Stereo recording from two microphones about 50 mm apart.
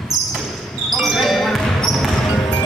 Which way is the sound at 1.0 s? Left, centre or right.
Centre.